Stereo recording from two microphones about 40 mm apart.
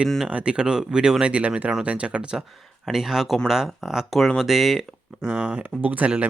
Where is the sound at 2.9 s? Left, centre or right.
Centre.